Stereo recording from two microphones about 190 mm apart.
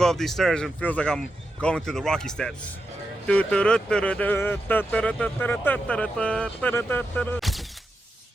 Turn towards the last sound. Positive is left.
turn(degrees=5)  # may be behind; listen again after turning